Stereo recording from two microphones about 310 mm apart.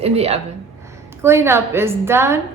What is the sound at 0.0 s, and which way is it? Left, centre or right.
Speech, centre.